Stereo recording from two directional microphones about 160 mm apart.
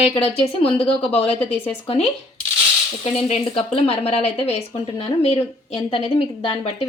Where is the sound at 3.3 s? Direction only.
35° left (ahead or behind).